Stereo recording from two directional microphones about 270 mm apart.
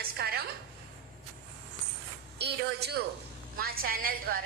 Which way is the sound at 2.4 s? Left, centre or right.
Right.